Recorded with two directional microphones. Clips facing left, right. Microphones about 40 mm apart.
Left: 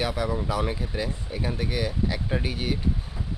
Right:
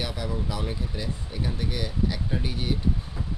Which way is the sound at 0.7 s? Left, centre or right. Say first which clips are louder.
Left 3 dB; left.